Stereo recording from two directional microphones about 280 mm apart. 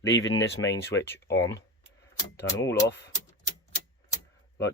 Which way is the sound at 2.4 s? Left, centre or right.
Centre.